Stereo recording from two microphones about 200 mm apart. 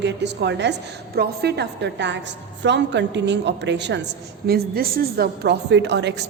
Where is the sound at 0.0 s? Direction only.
60° right (ahead or behind).